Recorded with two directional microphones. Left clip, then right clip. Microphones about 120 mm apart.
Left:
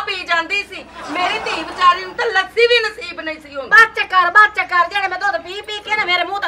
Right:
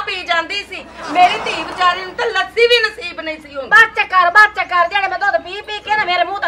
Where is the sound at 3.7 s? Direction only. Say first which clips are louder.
Right 1 dB; 15° left (ahead or behind).